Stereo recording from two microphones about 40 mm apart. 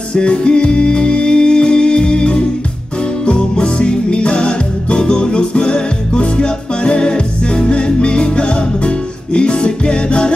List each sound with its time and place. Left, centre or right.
0.1 s music: left